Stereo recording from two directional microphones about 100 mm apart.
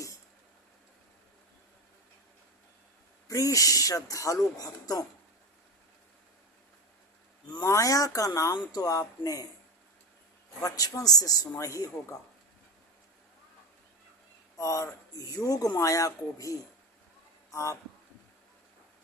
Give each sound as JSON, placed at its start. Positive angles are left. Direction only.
{"t": 3.2, "sound": "speech", "side_deg": 35}
{"t": 7.6, "sound": "speech", "side_deg": 35}
{"t": 10.6, "sound": "speech", "side_deg": 35}
{"t": 14.5, "sound": "speech", "side_deg": 35}